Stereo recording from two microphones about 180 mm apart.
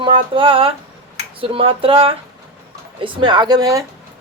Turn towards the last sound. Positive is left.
turn(degrees=-20)  # may be behind; listen again after turning